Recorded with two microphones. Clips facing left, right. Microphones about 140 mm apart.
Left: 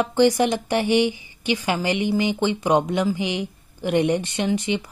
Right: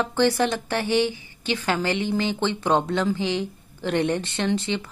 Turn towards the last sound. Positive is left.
turn(degrees=15)  # may be behind; listen again after turning